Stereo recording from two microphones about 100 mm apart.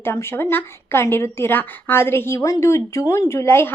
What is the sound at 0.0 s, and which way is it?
A woman's voice, 25° left (ahead or behind).